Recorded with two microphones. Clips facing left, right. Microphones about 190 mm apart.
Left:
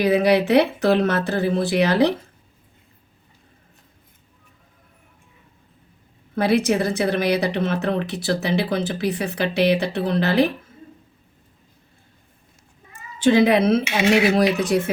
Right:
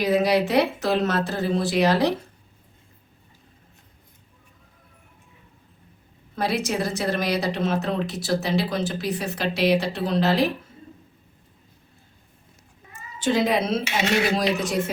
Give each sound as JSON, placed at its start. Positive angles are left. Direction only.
{"t": 0.1, "sound": "speech", "side_deg": 60}
{"t": 6.3, "sound": "speech", "side_deg": 60}
{"t": 13.2, "sound": "speech", "side_deg": 65}